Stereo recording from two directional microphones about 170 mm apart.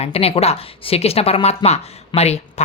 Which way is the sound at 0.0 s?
35° left (ahead or behind).